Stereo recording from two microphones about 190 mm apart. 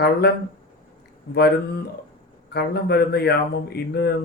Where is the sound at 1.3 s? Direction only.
65° left (ahead or behind).